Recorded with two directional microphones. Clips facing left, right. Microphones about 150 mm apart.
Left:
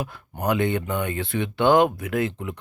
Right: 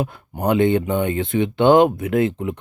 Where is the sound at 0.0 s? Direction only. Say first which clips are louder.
Right 5 dB; 25° right (ahead or behind).